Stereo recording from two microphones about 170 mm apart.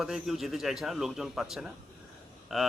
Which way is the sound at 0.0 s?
Centre (ahead or behind).